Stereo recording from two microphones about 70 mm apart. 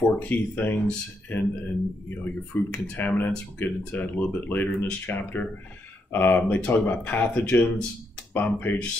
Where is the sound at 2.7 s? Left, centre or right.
Left.